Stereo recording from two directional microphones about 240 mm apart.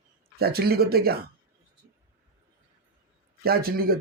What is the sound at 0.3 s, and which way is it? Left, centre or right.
Speech, right.